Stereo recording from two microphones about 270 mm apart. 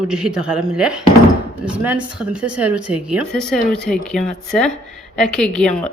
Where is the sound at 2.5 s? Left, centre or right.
Right.